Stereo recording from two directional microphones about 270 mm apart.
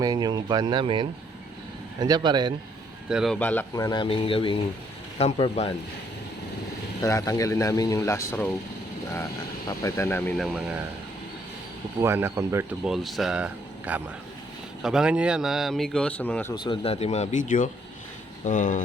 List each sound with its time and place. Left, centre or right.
0.0 s speech: centre
3.1 s speech: centre; by 5.7 s left
7.0 s speech: centre
9.6 s speech: centre
11.9 s speech: centre
16.8 s speech: left